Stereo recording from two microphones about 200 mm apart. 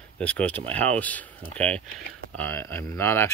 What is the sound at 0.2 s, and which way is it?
Speech, 5° left (ahead or behind).